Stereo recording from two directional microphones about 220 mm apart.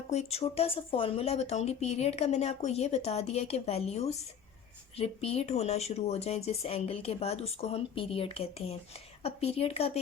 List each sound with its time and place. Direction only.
0.1 s speech: 30° left (ahead or behind)